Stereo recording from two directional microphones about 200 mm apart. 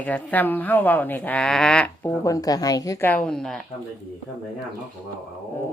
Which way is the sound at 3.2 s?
5° left (ahead or behind).